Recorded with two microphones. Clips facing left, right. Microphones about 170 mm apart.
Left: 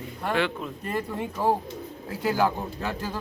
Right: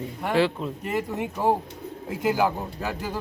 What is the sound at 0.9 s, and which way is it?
Speech, 15° right (ahead or behind).